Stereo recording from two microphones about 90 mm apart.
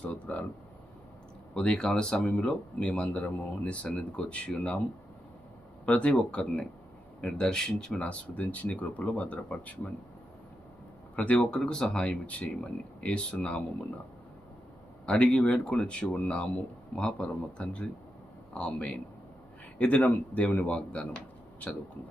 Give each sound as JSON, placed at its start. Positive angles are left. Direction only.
{"t": 0.0, "sound": "a sound", "side_deg": 15}
{"t": 1.5, "sound": "speech", "side_deg": 10}
{"t": 5.8, "sound": "speech", "side_deg": 15}
{"t": 11.2, "sound": "speech", "side_deg": 15}
{"t": 15.0, "sound": "speech", "side_deg": 10}